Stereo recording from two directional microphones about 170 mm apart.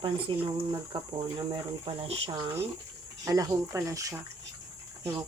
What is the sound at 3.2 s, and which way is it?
Speech, 20° right (ahead or behind).